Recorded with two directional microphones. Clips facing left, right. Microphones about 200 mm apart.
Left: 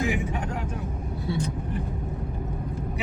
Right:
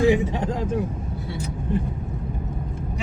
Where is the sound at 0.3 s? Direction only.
30° right (ahead or behind).